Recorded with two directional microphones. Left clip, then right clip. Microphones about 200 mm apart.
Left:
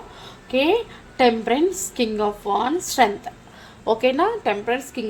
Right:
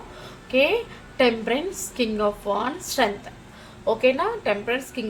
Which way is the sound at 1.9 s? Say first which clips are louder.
Left 1 dB; 40° left (ahead or behind).